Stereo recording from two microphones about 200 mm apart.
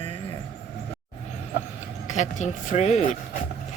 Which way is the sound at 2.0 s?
35° left (ahead or behind).